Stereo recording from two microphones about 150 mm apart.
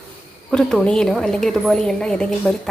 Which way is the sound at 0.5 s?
5° left (ahead or behind).